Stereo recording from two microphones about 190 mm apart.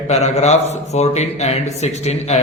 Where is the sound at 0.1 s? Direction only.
35° left (ahead or behind).